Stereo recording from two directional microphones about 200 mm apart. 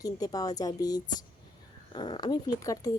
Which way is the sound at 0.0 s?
20° left (ahead or behind).